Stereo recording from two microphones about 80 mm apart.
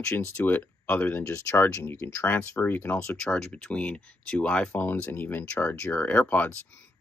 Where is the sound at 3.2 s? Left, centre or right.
Centre.